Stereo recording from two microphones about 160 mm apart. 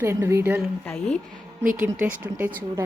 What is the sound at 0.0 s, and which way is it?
Speech, 15° right (ahead or behind).